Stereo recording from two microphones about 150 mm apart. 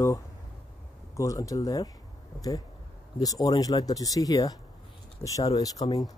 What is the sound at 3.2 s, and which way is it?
Speech, 25° left (ahead or behind).